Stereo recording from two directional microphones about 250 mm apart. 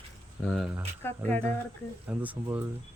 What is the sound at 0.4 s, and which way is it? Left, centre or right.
Speech, centre.